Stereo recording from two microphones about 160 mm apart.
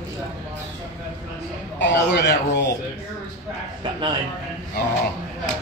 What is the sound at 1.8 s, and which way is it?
Speech, 90° left.